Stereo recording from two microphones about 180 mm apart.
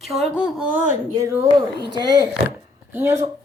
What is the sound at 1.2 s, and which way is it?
Speech, 15° right (ahead or behind).